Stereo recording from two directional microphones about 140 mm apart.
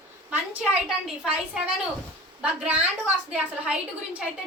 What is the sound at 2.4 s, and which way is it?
A woman's voice, 10° right (ahead or behind).